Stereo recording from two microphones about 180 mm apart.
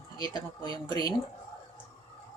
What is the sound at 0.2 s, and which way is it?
Speech, 20° left (ahead or behind).